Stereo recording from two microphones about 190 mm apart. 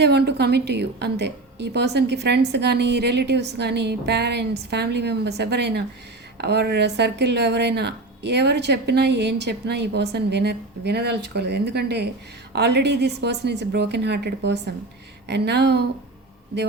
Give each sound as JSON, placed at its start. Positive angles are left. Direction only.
{"t": 0.0, "sound": "speech", "side_deg": -60}